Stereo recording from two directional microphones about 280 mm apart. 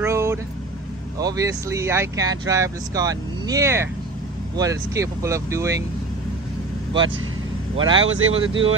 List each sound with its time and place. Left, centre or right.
0.0 s vehicle: centre
1.2 s speech: centre
8.0 s speech: right